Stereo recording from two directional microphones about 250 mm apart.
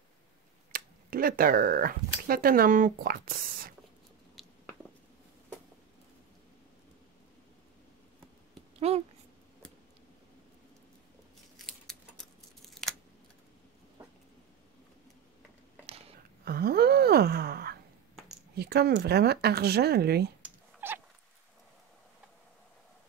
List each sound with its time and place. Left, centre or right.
0.7 s speech: right
8.7 s a sound: right
11.5 s scissors: centre
16.4 s gasp: right
18.5 s speech: right
20.4 s cat: centre